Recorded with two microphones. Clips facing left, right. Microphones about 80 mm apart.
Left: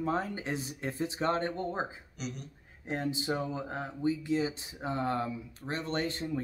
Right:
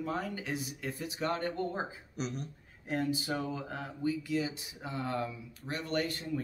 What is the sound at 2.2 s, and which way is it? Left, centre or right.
Speech, right.